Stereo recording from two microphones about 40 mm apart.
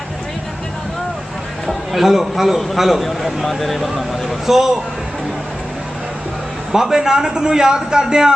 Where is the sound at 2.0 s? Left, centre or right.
Centre.